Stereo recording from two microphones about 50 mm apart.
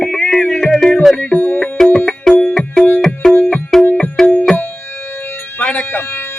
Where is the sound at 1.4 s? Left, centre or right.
Left.